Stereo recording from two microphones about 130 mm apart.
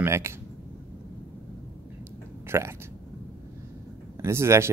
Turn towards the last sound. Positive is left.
turn(degrees=-20)  # may be behind; listen again after turning